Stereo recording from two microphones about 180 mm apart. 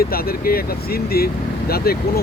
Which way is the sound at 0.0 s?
55° left (ahead or behind).